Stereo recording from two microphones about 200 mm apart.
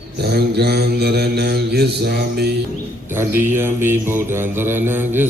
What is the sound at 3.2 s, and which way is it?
Mantra, 10° right (ahead or behind).